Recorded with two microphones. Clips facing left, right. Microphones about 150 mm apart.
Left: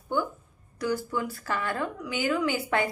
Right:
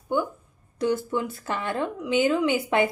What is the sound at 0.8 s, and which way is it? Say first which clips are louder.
Speech: right 4 dB; 25° right (ahead or behind).